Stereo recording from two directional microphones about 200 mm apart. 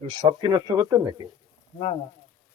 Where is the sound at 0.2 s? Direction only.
20° right (ahead or behind).